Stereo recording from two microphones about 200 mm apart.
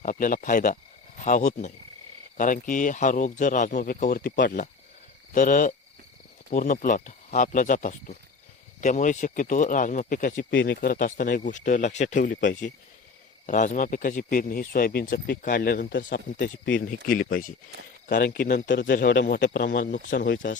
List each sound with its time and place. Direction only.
0.0 s speech: 40° left (ahead or behind)
10.5 s speech: 65° left (ahead or behind)
10.8 s speech: 40° left (ahead or behind)
16.7 s speech: 45° left (ahead or behind)
20.1 s speech: 60° left (ahead or behind)